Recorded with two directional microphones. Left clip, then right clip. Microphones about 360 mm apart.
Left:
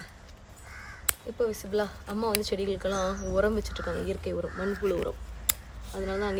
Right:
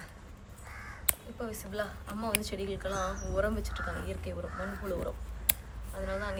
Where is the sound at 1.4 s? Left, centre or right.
Centre.